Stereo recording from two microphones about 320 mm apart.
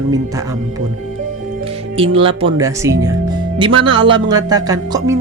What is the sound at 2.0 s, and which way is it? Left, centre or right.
Speech, centre.